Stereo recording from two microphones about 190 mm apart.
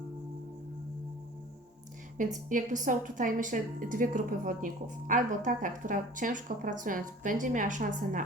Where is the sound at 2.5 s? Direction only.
45° right (ahead or behind).